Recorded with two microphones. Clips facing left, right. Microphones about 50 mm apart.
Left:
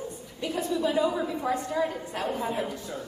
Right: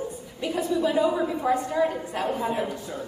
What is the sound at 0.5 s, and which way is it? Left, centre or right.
A woman's voice, centre.